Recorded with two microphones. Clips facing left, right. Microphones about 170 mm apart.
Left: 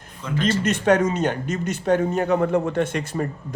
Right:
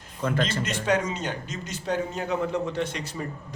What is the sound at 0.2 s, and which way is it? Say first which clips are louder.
Speech: left 3 dB; 55° right (ahead or behind).